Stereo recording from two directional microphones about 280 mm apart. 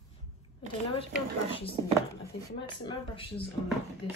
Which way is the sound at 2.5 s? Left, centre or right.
Centre.